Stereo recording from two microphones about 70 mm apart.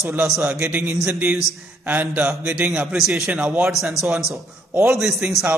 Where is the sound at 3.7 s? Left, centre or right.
Centre.